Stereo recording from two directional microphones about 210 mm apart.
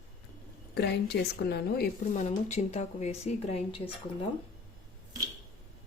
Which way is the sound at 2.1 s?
35° left (ahead or behind).